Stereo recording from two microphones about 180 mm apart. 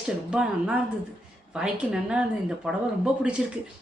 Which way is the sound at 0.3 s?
5° right (ahead or behind).